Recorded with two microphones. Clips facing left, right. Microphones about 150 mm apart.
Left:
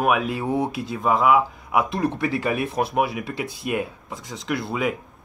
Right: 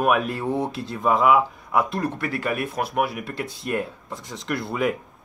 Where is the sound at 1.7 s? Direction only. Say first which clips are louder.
Left 1 dB; 15° left (ahead or behind).